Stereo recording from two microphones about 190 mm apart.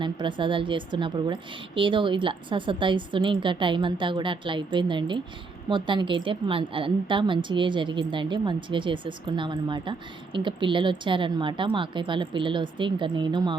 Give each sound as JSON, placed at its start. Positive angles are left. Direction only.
{"t": 0.0, "sound": "a woman's voice", "side_deg": -25}